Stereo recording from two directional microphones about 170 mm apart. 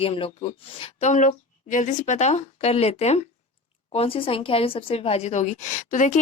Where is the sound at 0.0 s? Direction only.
35° left (ahead or behind).